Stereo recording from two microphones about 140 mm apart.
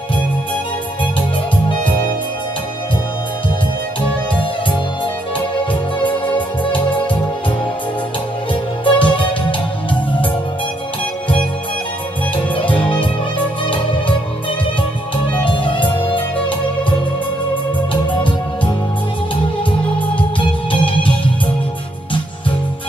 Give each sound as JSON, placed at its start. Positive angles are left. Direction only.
{"t": 8.8, "sound": "music", "side_deg": 35}
{"t": 12.5, "sound": "music", "side_deg": 35}
{"t": 15.4, "sound": "music", "side_deg": 35}
{"t": 20.3, "sound": "organ", "side_deg": 35}